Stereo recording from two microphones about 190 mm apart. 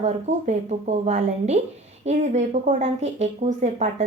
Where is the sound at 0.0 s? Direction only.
35° right (ahead or behind).